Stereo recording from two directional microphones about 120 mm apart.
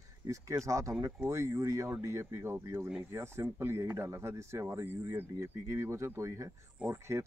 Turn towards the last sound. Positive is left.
turn(degrees=-25)  # may be behind; listen again after turning